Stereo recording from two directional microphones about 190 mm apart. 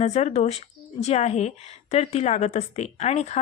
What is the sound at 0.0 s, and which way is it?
Speech, 35° left (ahead or behind).